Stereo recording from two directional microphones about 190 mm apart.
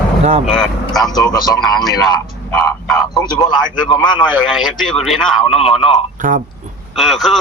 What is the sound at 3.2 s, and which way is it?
A man's voice, 20° left (ahead or behind).